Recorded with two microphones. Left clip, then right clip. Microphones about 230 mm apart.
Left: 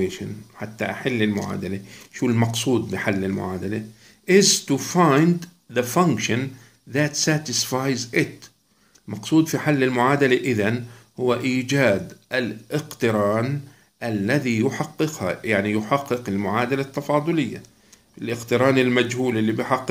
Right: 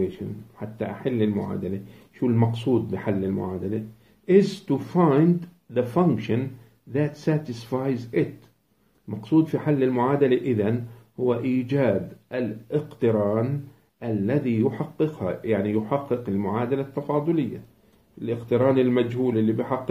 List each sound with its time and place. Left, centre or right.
0.0 s speech: left